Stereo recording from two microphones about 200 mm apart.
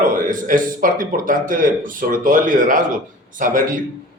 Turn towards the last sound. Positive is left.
turn(degrees=-40)  # may be behind; listen again after turning